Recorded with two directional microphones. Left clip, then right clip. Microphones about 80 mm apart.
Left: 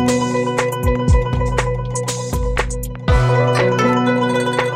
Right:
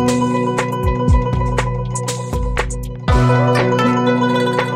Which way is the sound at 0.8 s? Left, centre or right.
Centre.